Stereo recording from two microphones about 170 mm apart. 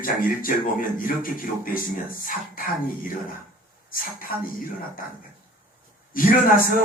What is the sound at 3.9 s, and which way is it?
Speech, 55° left (ahead or behind).